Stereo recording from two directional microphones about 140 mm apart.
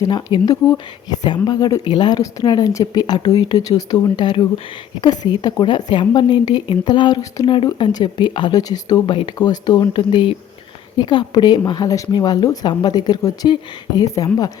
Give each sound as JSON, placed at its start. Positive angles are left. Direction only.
{"t": 0.0, "sound": "speech", "side_deg": 30}